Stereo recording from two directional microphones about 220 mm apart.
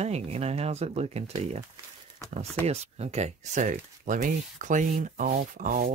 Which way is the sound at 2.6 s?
30° right (ahead or behind).